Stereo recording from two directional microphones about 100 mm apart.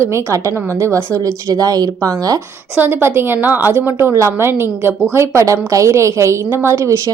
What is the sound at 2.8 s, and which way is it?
A woman's voice, 25° right (ahead or behind).